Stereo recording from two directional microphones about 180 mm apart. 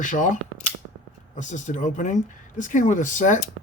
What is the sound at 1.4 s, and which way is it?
Speech, 45° left (ahead or behind).